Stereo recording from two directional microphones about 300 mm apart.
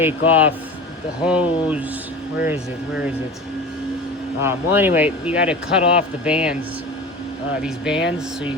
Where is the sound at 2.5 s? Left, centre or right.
Centre.